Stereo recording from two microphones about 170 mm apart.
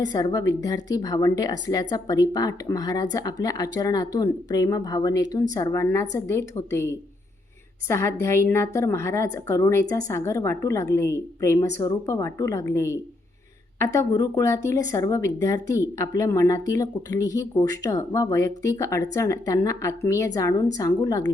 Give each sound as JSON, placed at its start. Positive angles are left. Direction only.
{"t": 0.1, "sound": "a woman's voice", "side_deg": 25}